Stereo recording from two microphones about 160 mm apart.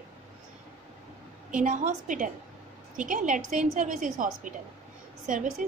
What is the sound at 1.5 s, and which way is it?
A woman's voice, 55° right (ahead or behind).